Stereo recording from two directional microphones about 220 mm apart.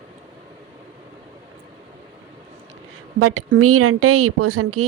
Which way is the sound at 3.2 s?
85° right.